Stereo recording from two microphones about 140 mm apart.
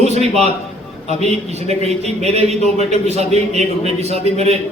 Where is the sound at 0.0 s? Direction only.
50° right (ahead or behind).